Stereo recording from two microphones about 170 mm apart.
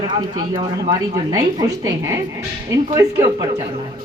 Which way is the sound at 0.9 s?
20° right (ahead or behind).